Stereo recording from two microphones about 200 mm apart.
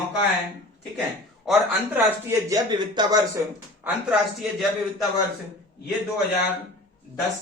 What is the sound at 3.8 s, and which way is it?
Speech, 5° right (ahead or behind).